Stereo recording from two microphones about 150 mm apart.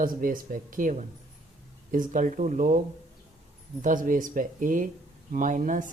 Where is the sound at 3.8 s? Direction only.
60° right (ahead or behind).